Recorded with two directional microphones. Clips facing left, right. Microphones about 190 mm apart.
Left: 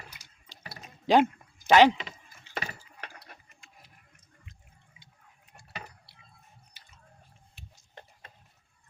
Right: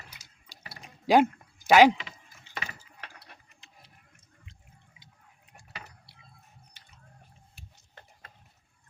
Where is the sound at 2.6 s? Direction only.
45° left (ahead or behind).